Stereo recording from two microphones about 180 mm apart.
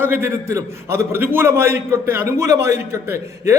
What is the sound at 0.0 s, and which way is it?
A man's voice, 10° right (ahead or behind).